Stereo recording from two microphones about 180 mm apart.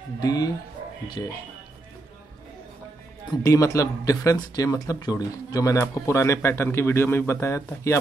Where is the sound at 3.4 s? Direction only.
15° left (ahead or behind).